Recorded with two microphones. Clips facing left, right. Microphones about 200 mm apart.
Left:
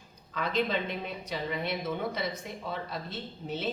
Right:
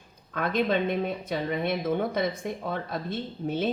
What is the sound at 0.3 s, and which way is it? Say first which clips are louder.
A woman's voice: right 4 dB; 55° right (ahead or behind).